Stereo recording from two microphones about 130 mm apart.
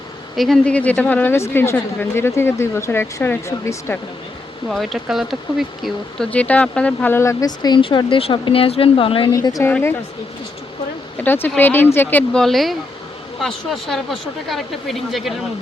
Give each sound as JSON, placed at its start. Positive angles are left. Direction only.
{"t": 0.3, "sound": "speech", "side_deg": 5}
{"t": 4.7, "sound": "speech", "side_deg": 0}
{"t": 6.3, "sound": "speech", "side_deg": 10}
{"t": 9.3, "sound": "speech", "side_deg": 25}
{"t": 11.2, "sound": "speech", "side_deg": 15}
{"t": 12.3, "sound": "speech", "side_deg": 5}